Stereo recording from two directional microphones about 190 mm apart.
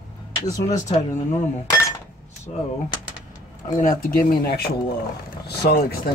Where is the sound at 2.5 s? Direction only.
35° left (ahead or behind).